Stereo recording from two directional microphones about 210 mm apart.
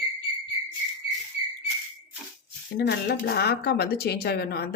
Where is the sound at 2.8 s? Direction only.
50° left (ahead or behind).